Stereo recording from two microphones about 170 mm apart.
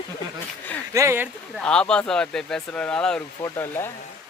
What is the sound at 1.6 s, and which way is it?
Speech, 5° left (ahead or behind).